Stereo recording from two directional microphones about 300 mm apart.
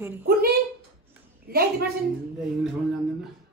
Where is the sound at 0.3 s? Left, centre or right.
Right.